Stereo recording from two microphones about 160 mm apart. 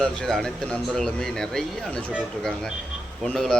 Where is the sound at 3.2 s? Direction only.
5° left (ahead or behind).